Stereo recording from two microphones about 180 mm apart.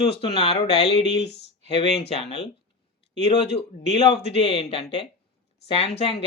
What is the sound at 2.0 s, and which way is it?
Speech, 35° left (ahead or behind).